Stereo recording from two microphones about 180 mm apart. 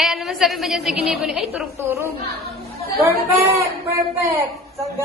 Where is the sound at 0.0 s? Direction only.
Centre (ahead or behind).